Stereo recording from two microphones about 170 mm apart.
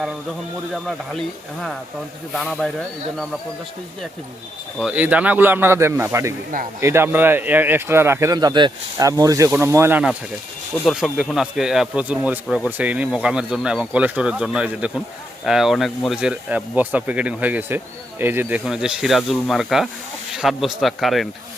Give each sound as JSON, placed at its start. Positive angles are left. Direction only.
{"t": 0.7, "sound": "speech", "side_deg": 0}
{"t": 2.3, "sound": "speech", "side_deg": 0}
{"t": 4.8, "sound": "speech", "side_deg": -5}
{"t": 10.8, "sound": "speech", "side_deg": 0}